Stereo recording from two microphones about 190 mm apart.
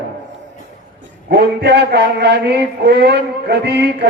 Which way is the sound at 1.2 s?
60° right (ahead or behind).